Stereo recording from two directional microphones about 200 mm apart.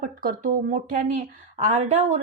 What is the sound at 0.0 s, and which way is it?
A woman's voice, 45° right (ahead or behind).